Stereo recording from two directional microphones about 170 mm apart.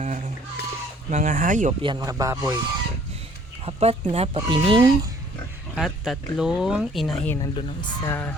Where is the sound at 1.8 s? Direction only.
20° right (ahead or behind).